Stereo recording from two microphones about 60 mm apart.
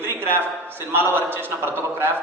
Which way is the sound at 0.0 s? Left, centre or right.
Right.